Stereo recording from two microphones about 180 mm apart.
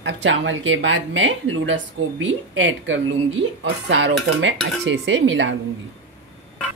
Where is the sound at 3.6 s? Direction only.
75° right (ahead or behind).